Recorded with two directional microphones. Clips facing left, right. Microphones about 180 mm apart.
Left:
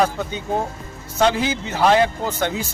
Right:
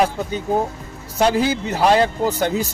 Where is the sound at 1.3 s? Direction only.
35° right (ahead or behind).